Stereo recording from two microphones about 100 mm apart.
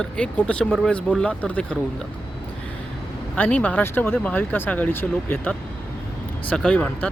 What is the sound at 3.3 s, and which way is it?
Speech, 15° left (ahead or behind).